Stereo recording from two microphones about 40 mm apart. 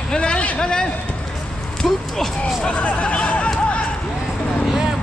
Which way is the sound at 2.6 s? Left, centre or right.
Left.